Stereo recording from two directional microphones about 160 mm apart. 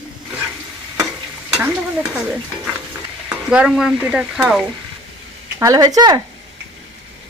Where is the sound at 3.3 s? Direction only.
5° right (ahead or behind).